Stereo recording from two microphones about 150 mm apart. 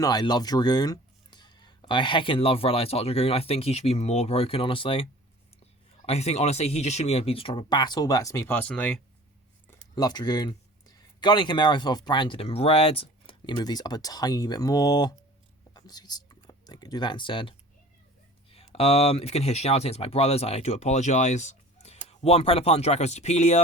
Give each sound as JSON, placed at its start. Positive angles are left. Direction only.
{"t": 0.0, "sound": "speech", "side_deg": 25}
{"t": 6.1, "sound": "speech", "side_deg": 45}
{"t": 9.9, "sound": "speech", "side_deg": 25}
{"t": 18.5, "sound": "speech", "side_deg": 40}